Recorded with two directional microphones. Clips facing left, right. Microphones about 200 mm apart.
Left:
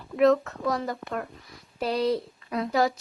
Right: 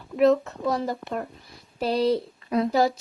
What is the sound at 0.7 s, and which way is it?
Speech, 30° right (ahead or behind).